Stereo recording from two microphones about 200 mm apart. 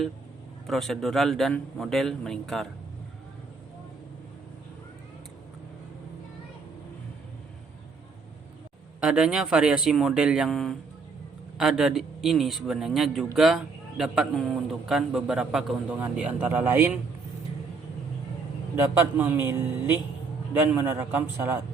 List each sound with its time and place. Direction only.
0.7 s a man's voice: centre (ahead or behind)
9.0 s a man's voice: 5° right (ahead or behind)
18.8 s a man's voice: 10° right (ahead or behind)